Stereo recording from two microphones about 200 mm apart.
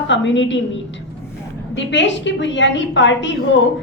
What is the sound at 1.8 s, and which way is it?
A woman's voice, 65° left (ahead or behind).